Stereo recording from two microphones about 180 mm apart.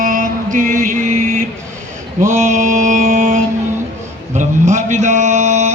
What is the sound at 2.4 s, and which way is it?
Mantra, 45° right (ahead or behind).